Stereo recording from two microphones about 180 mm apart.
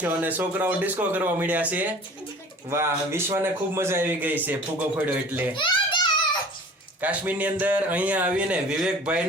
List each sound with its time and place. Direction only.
0.0 s a man's voice: 10° right (ahead or behind)
5.5 s a sound: 25° left (ahead or behind)
7.0 s a man's voice: 10° right (ahead or behind)